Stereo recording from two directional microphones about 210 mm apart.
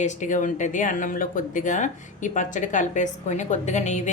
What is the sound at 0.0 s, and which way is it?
Speech, 35° left (ahead or behind).